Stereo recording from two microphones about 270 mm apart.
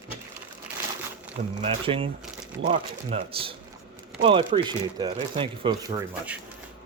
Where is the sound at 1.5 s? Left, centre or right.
Centre.